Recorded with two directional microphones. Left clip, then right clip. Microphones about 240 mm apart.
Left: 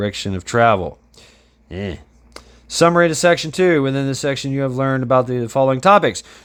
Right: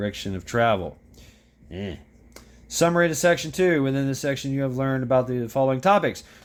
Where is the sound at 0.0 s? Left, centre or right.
Left.